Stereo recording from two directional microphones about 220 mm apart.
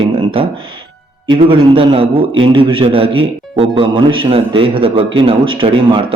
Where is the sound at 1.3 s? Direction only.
25° right (ahead or behind).